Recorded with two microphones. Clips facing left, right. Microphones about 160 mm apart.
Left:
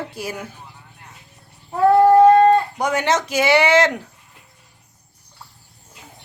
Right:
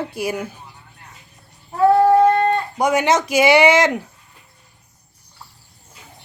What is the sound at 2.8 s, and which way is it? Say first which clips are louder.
Speech: right 3 dB; 10° right (ahead or behind).